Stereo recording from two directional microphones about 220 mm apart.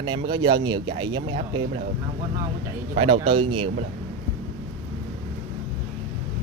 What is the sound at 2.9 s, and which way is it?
Speech, 25° right (ahead or behind).